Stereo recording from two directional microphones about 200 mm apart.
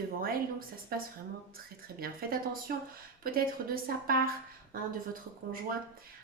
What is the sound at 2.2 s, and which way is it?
A woman's voice, 50° right (ahead or behind).